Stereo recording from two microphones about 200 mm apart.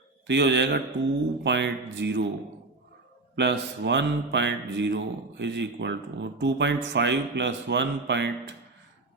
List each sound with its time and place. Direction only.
0.3 s mantra: 60° right (ahead or behind)
3.3 s mantra: 60° right (ahead or behind)